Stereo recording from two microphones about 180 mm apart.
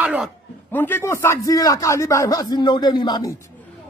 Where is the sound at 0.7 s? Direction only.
10° left (ahead or behind).